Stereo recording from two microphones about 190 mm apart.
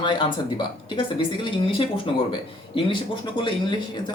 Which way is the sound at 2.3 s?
25° left (ahead or behind).